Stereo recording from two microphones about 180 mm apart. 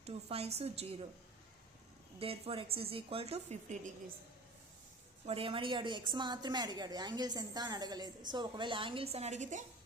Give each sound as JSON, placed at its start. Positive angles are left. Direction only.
{"t": 0.0, "sound": "a woman's voice", "side_deg": -35}
{"t": 2.1, "sound": "a woman's voice", "side_deg": -30}
{"t": 5.2, "sound": "a woman's voice", "side_deg": -30}